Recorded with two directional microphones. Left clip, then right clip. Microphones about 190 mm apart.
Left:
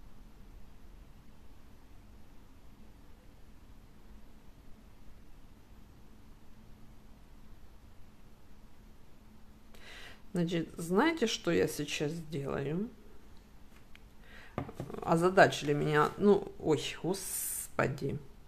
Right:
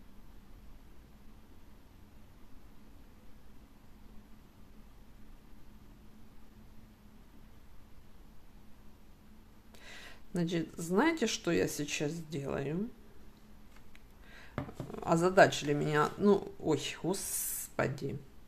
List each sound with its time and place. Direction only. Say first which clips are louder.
9.8 s speech: even; centre (ahead or behind)
14.9 s speech: left 1 dB; centre (ahead or behind)
17.7 s speech: left 2 dB; 15° left (ahead or behind)